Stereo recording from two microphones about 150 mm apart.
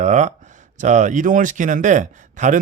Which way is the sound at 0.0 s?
50° right (ahead or behind).